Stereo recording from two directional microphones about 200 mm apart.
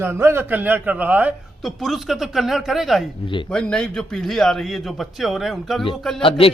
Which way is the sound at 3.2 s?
25° left (ahead or behind).